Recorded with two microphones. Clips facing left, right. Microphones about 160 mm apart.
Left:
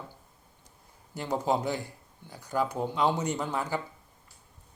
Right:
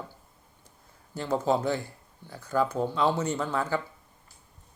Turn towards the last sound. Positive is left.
turn(degrees=15)  # may be behind; listen again after turning